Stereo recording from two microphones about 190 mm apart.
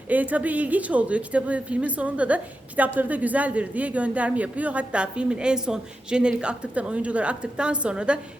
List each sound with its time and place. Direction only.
0.1 s a woman's voice: 10° right (ahead or behind)